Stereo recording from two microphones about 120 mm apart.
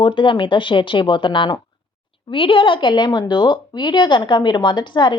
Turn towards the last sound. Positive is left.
turn(degrees=40)  # may be behind; listen again after turning